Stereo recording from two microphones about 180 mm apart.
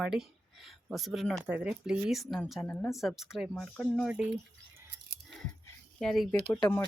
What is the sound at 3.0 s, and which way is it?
Speech, centre (ahead or behind).